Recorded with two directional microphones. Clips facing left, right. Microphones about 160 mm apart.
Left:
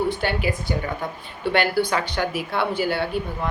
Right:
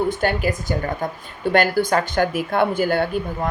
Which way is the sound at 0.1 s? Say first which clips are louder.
Right 3 dB; 45° right (ahead or behind).